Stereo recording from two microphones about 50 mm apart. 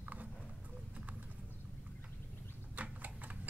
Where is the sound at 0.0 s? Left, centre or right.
Right.